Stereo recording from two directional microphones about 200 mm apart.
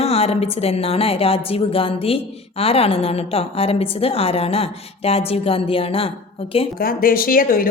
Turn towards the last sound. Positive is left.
turn(degrees=45)  # may be behind; listen again after turning